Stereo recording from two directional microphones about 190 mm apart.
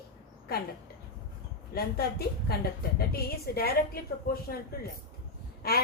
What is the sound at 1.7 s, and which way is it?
A woman's voice, 55° left (ahead or behind).